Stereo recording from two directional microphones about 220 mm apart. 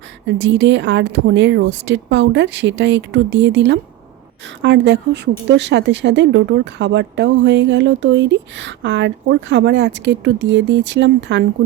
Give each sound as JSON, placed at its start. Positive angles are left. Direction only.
{"t": 0.3, "sound": "a woman's voice", "side_deg": -55}